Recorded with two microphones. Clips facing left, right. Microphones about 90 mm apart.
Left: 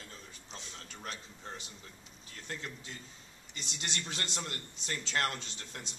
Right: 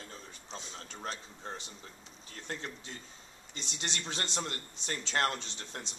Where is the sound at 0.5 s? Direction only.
20° right (ahead or behind).